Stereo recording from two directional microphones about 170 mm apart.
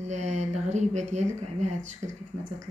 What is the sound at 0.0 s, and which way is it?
Speech, 45° right (ahead or behind).